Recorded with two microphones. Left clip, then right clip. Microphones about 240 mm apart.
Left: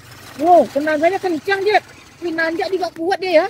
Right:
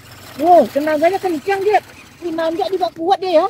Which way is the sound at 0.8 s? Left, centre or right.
Centre.